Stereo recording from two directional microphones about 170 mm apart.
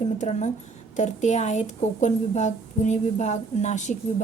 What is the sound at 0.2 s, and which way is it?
Speech, 45° left (ahead or behind).